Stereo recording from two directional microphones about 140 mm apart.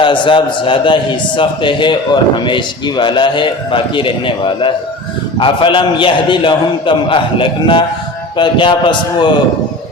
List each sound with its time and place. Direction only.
0.0 s speech: 35° left (ahead or behind)